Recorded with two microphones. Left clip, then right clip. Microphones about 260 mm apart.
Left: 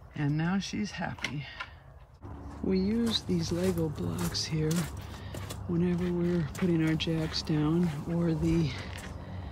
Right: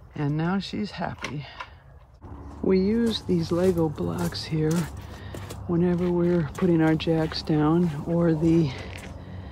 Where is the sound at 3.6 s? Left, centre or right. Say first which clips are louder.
Right 9 dB; right.